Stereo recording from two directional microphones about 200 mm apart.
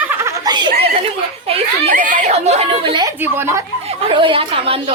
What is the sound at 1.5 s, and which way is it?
Speech, 35° right (ahead or behind).